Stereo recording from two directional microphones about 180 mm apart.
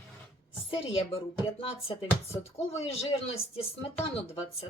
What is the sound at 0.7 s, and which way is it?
Speech, 30° left (ahead or behind).